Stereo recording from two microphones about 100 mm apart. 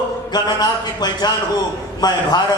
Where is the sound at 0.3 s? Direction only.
45° left (ahead or behind).